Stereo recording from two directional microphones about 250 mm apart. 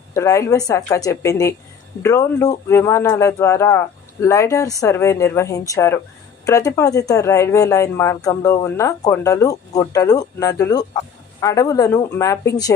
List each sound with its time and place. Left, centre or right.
0.1 s speech: centre